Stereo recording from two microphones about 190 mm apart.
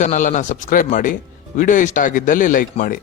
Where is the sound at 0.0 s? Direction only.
40° left (ahead or behind).